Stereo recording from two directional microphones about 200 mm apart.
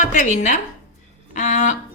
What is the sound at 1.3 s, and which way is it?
Music, 35° left (ahead or behind).